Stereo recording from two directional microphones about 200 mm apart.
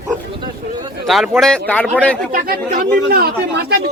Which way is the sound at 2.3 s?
45° right (ahead or behind).